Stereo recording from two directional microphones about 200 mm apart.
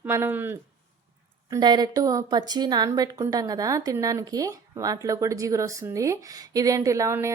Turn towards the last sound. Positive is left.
turn(degrees=-15)  # may be behind; listen again after turning